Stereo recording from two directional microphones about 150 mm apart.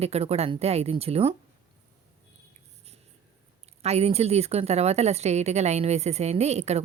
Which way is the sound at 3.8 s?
45° right (ahead or behind).